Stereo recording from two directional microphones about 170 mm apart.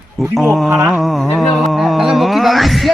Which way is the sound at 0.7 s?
15° right (ahead or behind).